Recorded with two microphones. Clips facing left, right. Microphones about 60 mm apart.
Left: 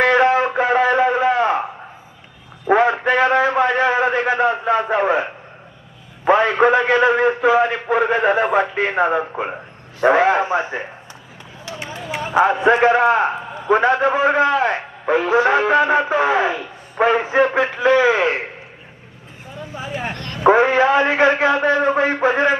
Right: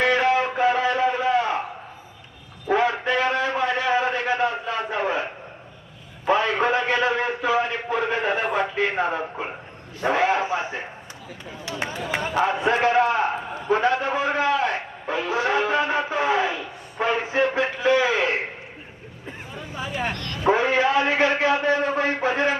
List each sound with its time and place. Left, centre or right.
0.0 s a sound: left
2.6 s a sound: left
6.2 s a man's voice: left
11.8 s run: right
12.3 s a man's voice: left
19.7 s a man's voice: left